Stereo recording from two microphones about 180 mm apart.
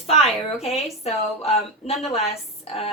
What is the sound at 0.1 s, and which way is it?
Speech, 35° left (ahead or behind).